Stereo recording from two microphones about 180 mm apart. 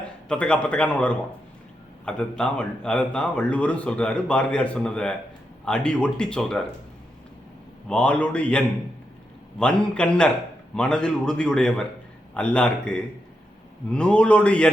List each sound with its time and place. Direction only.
0.3 s a man's voice: 5° left (ahead or behind)
7.9 s a man's voice: 5° left (ahead or behind)